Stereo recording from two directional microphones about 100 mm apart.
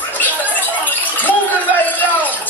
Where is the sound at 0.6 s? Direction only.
20° left (ahead or behind).